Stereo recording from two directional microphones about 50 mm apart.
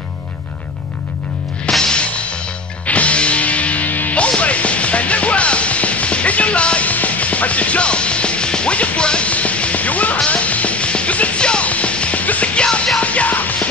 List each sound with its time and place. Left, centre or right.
1.7 s music: centre; by 12.6 s left
12.6 s music: centre
13.0 s music: left